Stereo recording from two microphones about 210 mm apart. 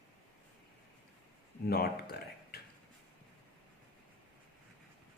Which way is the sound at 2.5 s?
50° left (ahead or behind).